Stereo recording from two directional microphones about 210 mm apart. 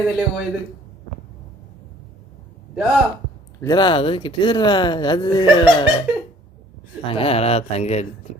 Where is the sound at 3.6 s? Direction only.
20° left (ahead or behind).